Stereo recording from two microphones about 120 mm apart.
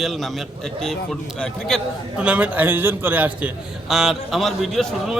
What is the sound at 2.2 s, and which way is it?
A man's voice, 10° right (ahead or behind).